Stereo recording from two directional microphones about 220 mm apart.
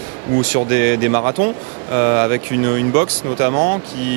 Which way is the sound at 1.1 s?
20° right (ahead or behind).